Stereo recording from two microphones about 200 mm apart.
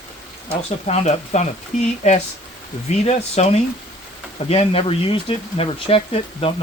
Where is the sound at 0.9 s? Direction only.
35° left (ahead or behind).